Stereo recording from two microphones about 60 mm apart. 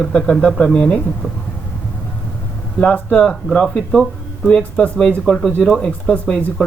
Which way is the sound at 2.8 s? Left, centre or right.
Left.